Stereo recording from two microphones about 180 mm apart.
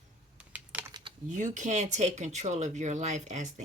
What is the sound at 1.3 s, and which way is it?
Speech, 45° right (ahead or behind).